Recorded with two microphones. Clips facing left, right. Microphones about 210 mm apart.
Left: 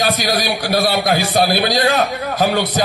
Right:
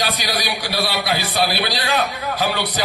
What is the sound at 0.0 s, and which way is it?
A man's voice, 45° left (ahead or behind).